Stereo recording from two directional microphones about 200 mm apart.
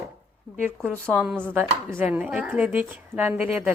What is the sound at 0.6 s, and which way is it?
Speech, 10° right (ahead or behind).